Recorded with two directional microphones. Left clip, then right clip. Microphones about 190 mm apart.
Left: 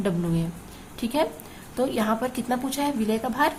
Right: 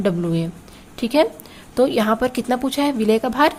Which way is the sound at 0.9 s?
35° right (ahead or behind).